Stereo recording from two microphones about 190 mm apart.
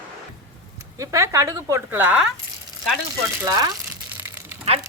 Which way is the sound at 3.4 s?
20° right (ahead or behind).